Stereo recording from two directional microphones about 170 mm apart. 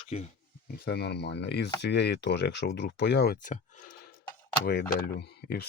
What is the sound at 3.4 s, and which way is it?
Speech, 50° left (ahead or behind).